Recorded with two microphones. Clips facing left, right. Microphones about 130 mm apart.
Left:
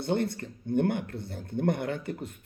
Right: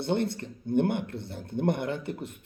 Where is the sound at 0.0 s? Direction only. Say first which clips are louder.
Right 1 dB; 25° right (ahead or behind).